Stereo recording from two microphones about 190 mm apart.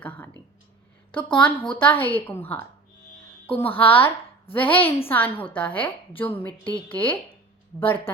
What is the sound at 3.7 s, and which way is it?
A woman's voice, 10° left (ahead or behind).